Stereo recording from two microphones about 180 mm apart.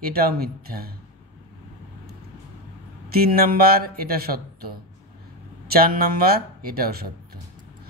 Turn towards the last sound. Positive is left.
turn(degrees=-55)  # may be behind; listen again after turning